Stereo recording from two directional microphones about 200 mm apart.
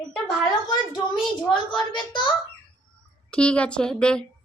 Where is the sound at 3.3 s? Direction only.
5° left (ahead or behind).